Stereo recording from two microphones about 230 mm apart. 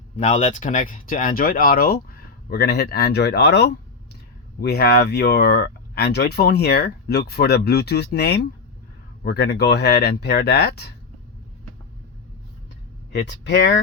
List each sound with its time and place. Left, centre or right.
0.2 s speech: left
13.1 s speech: left